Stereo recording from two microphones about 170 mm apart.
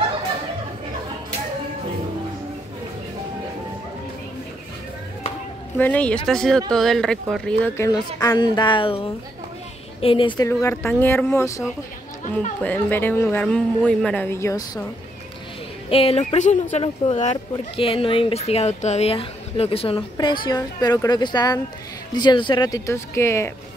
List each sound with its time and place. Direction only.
5.8 s speech: 10° left (ahead or behind)
12.6 s speech: 10° left (ahead or behind)
15.9 s speech: 35° left (ahead or behind); by 23.5 s 15° left (ahead or behind)